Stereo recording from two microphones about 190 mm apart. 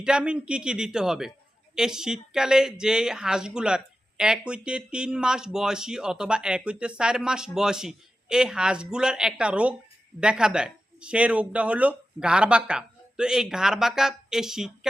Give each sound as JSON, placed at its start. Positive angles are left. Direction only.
{"t": 0.0, "sound": "speech", "side_deg": -5}